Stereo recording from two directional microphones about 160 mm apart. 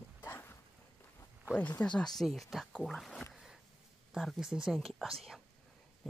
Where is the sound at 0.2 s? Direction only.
15° left (ahead or behind).